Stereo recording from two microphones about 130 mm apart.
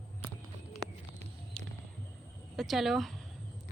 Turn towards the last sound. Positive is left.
turn(degrees=0)  # may be behind; listen again after turning